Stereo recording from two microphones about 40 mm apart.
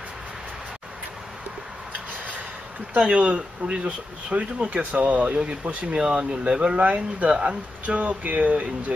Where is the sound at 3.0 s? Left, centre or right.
Right.